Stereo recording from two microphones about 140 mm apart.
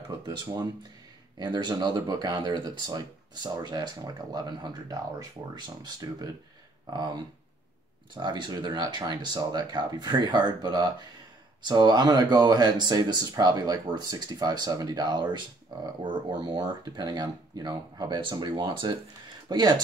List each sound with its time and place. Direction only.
1.4 s speech: 35° right (ahead or behind)